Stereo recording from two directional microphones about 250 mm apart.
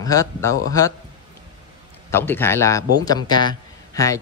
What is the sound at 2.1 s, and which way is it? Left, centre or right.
A man's voice, centre.